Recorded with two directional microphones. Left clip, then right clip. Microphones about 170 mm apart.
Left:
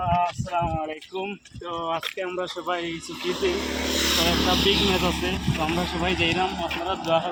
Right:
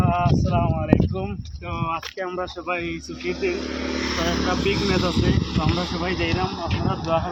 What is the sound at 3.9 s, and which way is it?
Speech, 30° right (ahead or behind).